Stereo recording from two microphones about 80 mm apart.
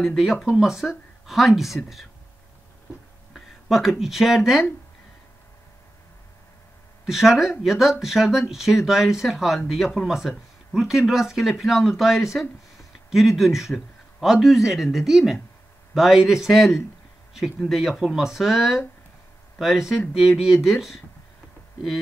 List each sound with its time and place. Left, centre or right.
0.0 s speech: centre
3.6 s speech: centre
7.1 s speech: centre